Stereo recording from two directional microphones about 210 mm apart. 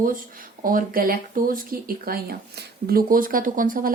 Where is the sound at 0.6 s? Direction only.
40° right (ahead or behind).